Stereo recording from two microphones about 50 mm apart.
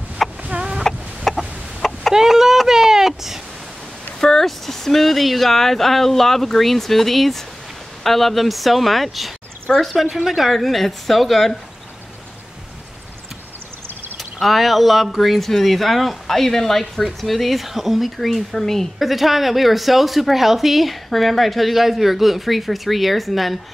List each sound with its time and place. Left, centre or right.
0.4 s chicken: right
1.3 s chicken: centre
2.1 s a sound: centre
4.2 s speech: centre
14.1 s speech: centre
18.9 s speech: centre